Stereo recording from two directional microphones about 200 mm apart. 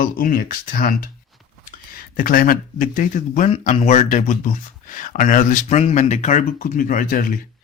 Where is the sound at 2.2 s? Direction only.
45° left (ahead or behind).